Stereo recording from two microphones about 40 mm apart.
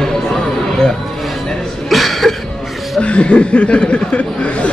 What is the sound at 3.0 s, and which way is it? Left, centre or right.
Speech, left.